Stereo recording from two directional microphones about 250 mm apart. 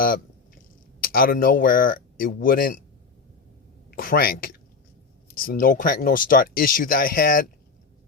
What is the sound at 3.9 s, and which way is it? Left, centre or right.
Speech, left.